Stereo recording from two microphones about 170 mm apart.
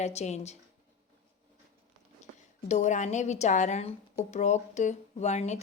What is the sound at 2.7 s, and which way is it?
Speech, 45° left (ahead or behind).